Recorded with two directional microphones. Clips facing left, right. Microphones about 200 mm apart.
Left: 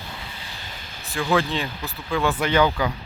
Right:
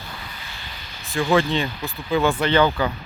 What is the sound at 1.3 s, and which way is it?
Speech, centre (ahead or behind).